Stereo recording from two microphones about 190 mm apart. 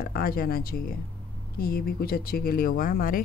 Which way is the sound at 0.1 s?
50° left (ahead or behind).